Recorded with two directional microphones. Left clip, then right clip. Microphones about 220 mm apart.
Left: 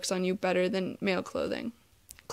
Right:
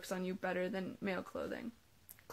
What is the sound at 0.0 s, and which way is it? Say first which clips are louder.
A woman's voice: left 11 dB; 35° left (ahead or behind).